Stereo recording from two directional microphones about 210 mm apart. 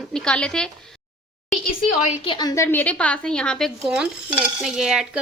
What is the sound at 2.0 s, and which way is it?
A woman's voice, 30° left (ahead or behind).